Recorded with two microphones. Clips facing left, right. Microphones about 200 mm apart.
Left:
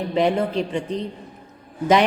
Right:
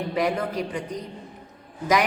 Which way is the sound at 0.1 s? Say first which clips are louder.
Left 6 dB; 25° left (ahead or behind).